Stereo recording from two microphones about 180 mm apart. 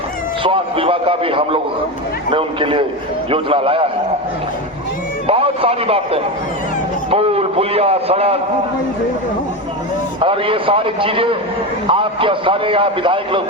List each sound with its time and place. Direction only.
0.4 s a man's voice: 30° right (ahead or behind)
5.2 s a man's voice: 30° right (ahead or behind)
10.2 s a man's voice: 30° right (ahead or behind)